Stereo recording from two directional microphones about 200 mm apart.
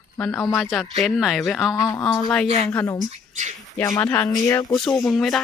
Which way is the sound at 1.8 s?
20° left (ahead or behind).